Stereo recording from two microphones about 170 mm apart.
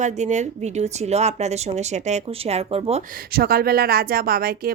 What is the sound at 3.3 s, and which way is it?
Speech, 60° right (ahead or behind).